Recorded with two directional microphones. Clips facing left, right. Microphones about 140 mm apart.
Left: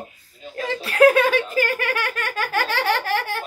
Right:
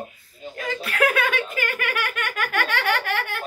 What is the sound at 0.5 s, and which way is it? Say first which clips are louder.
Giggle: left 6 dB; 30° left (ahead or behind).